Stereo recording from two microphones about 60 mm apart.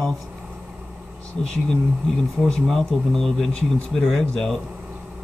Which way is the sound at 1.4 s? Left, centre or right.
Centre.